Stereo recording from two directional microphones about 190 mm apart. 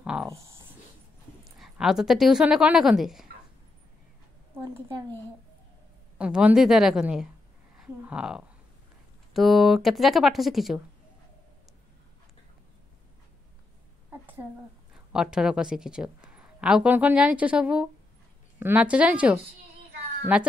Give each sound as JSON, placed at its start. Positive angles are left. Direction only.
{"t": 0.0, "sound": "writing", "side_deg": -5}
{"t": 0.3, "sound": "writing", "side_deg": -15}
{"t": 1.6, "sound": "a woman's voice", "side_deg": 0}
{"t": 4.6, "sound": "a sound", "side_deg": -10}
{"t": 6.1, "sound": "a woman's voice", "side_deg": -5}
{"t": 7.7, "sound": "a sound", "side_deg": -5}
{"t": 9.3, "sound": "a woman's voice", "side_deg": 0}
{"t": 14.2, "sound": "a sound", "side_deg": -10}
{"t": 15.1, "sound": "a woman's voice", "side_deg": -5}